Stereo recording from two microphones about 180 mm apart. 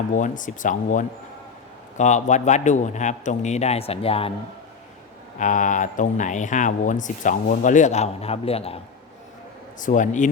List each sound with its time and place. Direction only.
0.1 s a man's voice: 45° left (ahead or behind)
5.4 s speech: 45° left (ahead or behind)
9.8 s speech: 45° left (ahead or behind)